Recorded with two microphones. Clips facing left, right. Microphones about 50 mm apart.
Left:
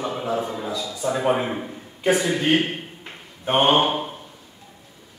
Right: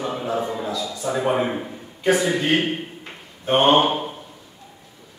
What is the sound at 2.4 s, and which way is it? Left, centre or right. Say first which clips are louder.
Speech: even; centre.